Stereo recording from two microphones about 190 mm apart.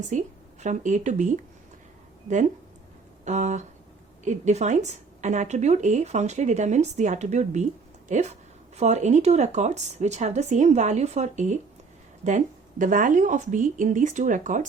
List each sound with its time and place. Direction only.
0.1 s speech: 40° right (ahead or behind)
3.2 s speech: 40° right (ahead or behind)
12.8 s speech: 45° right (ahead or behind)